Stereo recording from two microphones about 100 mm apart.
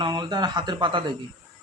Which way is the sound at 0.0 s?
45° right (ahead or behind).